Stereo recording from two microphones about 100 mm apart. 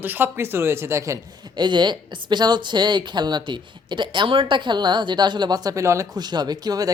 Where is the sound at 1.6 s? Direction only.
50° right (ahead or behind).